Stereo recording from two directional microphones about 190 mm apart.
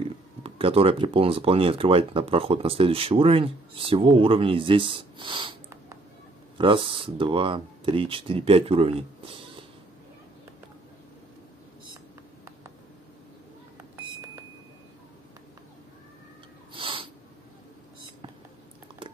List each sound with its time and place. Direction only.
0.0 s speech: 30° right (ahead or behind)
6.6 s speech: 25° right (ahead or behind)
16.7 s snort: 25° right (ahead or behind)